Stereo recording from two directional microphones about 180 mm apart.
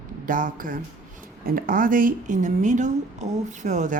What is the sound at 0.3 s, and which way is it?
Speech, 50° right (ahead or behind).